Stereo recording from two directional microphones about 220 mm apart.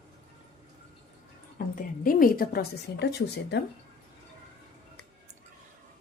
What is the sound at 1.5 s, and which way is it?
A woman's voice, 40° left (ahead or behind).